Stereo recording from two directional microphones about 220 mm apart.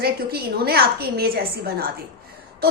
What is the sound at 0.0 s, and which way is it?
Speech, 45° right (ahead or behind).